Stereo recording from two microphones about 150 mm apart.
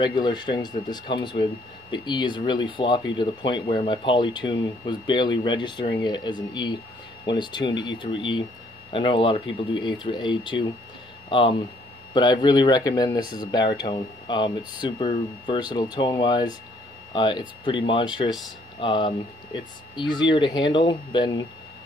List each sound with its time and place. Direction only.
0.0 s speech: 30° left (ahead or behind)